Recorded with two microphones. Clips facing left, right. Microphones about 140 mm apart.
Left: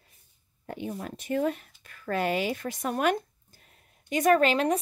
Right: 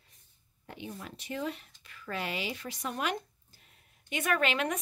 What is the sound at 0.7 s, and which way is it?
Speech, 50° left (ahead or behind).